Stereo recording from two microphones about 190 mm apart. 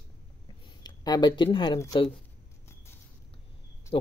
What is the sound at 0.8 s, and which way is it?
Speech, 20° left (ahead or behind).